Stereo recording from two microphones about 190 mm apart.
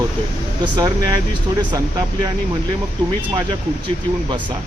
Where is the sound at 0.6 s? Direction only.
20° right (ahead or behind).